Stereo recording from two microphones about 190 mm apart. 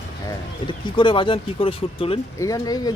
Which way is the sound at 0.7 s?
25° left (ahead or behind).